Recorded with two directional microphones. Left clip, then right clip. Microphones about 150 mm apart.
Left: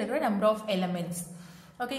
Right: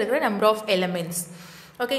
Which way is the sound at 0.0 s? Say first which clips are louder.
Right 6 dB; 15° right (ahead or behind).